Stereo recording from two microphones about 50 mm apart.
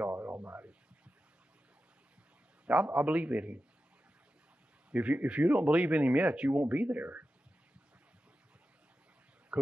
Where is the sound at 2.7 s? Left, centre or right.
Right.